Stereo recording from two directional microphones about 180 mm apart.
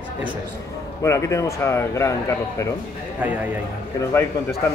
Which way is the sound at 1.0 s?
15° left (ahead or behind).